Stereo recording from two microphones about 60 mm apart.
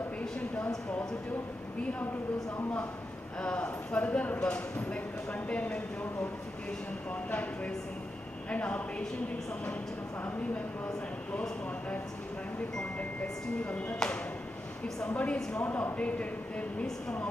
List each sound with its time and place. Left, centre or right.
3.3 s speech: centre
7.2 s speech: left
13.7 s speech: left
15.0 s speech: centre